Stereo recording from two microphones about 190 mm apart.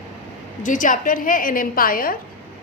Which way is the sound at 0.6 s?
45° left (ahead or behind).